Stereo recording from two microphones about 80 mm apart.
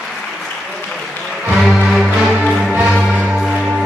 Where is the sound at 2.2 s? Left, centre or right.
Centre.